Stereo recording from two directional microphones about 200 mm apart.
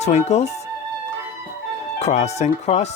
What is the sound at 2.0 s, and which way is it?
Speech, 35° left (ahead or behind).